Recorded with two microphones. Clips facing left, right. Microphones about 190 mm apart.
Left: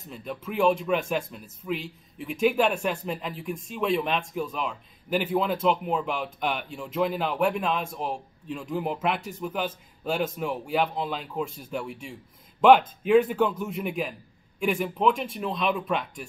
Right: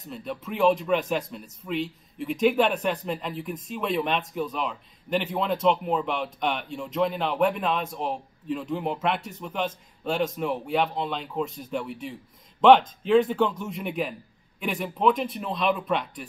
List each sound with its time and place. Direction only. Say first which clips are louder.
0.1 s a man's voice: even; centre (ahead or behind)